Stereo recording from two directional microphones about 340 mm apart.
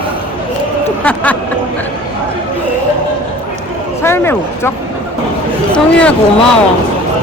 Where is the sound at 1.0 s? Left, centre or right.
Centre.